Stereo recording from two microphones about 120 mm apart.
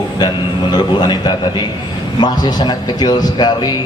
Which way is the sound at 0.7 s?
35° left (ahead or behind).